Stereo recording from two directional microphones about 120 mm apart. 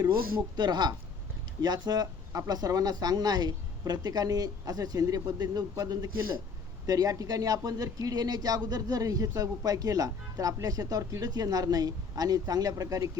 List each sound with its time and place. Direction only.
0.5 s speech: 35° right (ahead or behind)